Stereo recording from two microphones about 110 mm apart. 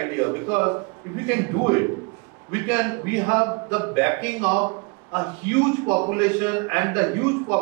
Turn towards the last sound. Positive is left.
turn(degrees=-25)  # may be behind; listen again after turning